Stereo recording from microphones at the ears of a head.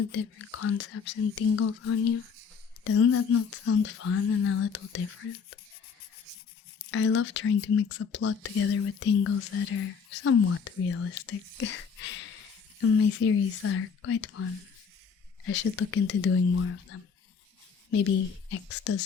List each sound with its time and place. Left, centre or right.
0.0 s speech: left
6.8 s speech: left
15.4 s speech: left
17.9 s speech: left